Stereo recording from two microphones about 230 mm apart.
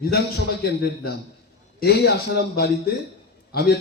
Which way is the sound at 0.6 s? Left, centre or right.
Left.